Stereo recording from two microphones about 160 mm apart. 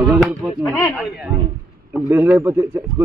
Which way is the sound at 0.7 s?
10° left (ahead or behind).